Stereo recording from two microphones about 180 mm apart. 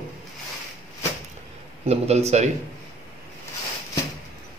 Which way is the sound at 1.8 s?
35° right (ahead or behind).